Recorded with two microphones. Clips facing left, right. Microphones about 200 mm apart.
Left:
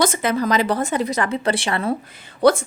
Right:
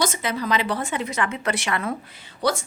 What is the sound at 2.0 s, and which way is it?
Speech, 50° left (ahead or behind).